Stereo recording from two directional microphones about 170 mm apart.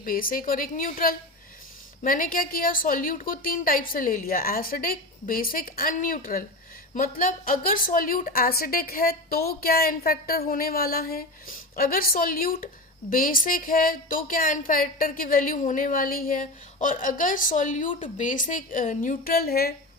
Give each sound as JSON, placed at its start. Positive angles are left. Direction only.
{"t": 0.0, "sound": "a woman's voice", "side_deg": 55}